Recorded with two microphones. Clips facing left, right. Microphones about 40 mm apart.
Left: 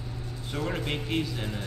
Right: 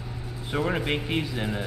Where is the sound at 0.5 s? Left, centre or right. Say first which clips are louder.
Right 5 dB; centre.